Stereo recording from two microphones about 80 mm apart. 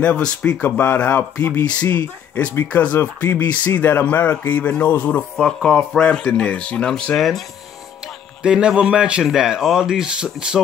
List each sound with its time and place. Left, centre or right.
0.0 s speech: centre
7.2 s speech: centre
8.4 s speech: centre